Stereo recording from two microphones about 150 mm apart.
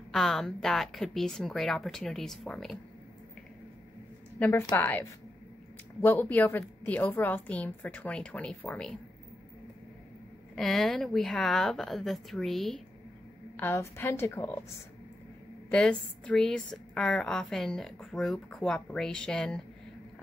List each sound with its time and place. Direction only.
0.1 s a woman's voice: centre (ahead or behind)
4.4 s a woman's voice: 15° left (ahead or behind)
10.5 s a woman's voice: centre (ahead or behind)
13.6 s a woman's voice: 15° left (ahead or behind)
15.7 s a woman's voice: 5° left (ahead or behind)